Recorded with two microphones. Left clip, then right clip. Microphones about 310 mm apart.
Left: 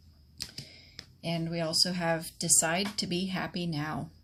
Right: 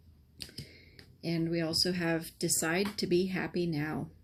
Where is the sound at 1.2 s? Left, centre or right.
Left.